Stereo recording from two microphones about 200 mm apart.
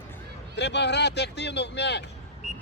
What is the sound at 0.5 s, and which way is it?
Speech, 60° left (ahead or behind).